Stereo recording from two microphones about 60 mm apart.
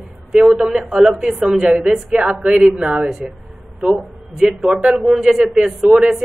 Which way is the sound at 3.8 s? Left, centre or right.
Centre.